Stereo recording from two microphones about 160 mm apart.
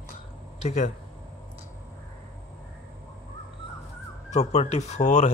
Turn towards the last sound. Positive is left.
turn(degrees=45)  # may be behind; listen again after turning